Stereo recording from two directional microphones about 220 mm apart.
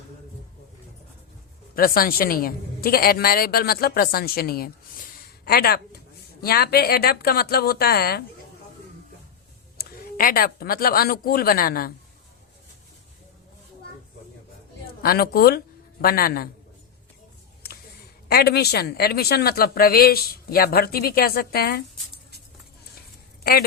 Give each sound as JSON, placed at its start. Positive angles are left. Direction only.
{"t": 1.7, "sound": "speech", "side_deg": 40}
{"t": 9.7, "sound": "speech", "side_deg": 40}
{"t": 15.0, "sound": "speech", "side_deg": 45}
{"t": 18.3, "sound": "speech", "side_deg": 45}
{"t": 23.4, "sound": "speech", "side_deg": 45}